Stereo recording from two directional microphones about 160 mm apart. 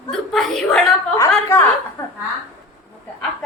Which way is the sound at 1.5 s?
15° left (ahead or behind).